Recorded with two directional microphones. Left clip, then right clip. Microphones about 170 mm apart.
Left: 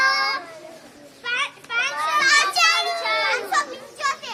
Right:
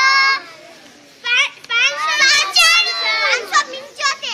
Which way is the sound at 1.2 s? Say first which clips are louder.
Right 9 dB; 50° left (ahead or behind).